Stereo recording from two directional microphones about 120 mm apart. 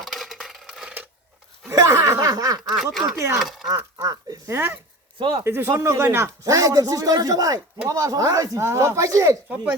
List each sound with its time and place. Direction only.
0.0 s a sound: centre (ahead or behind)
1.7 s speech: 25° right (ahead or behind)
2.6 s speech: 5° right (ahead or behind)
3.2 s speech: 20° right (ahead or behind)